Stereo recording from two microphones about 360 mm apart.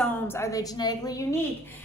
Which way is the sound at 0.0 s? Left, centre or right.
Centre.